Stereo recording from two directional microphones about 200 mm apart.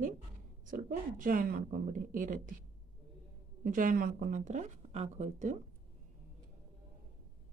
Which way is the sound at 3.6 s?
40° right (ahead or behind).